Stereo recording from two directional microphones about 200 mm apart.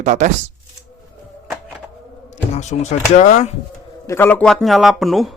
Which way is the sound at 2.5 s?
35° left (ahead or behind).